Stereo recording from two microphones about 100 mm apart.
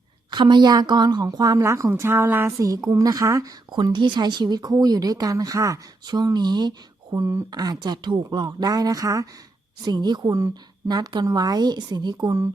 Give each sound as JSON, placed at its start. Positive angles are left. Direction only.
{"t": 0.3, "sound": "speech", "side_deg": -50}
{"t": 3.7, "sound": "speech", "side_deg": -50}
{"t": 9.8, "sound": "a woman's voice", "side_deg": -45}